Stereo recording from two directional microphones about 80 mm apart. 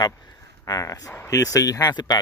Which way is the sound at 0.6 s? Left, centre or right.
Left.